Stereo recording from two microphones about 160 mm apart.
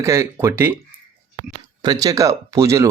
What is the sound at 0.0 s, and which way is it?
Speech, 20° right (ahead or behind).